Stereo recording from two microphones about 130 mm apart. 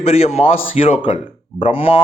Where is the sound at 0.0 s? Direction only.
55° left (ahead or behind).